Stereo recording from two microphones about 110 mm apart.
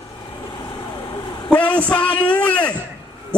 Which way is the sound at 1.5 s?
10° left (ahead or behind).